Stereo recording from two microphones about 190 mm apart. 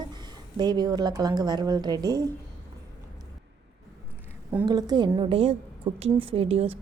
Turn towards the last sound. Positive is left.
turn(degrees=-30)  # may be behind; listen again after turning